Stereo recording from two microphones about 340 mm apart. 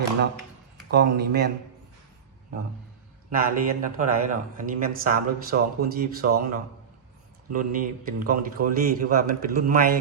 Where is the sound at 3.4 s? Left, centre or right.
Right.